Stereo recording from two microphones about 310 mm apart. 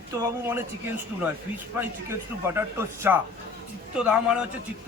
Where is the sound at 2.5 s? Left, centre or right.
Centre.